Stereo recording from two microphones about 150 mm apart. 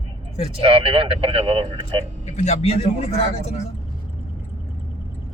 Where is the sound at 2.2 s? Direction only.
50° left (ahead or behind).